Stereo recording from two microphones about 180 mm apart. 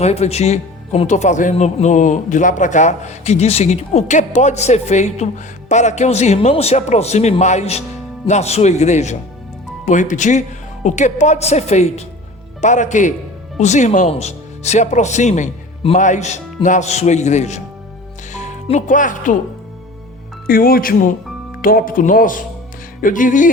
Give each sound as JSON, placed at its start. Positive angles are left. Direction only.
{"t": 0.0, "sound": "speech", "side_deg": 35}
{"t": 20.5, "sound": "speech", "side_deg": 55}